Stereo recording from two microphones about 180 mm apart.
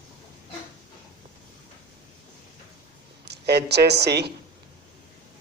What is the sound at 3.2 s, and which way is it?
Speech, 65° right (ahead or behind).